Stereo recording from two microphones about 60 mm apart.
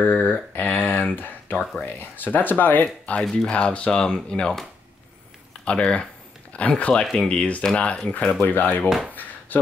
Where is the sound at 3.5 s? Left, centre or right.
Centre.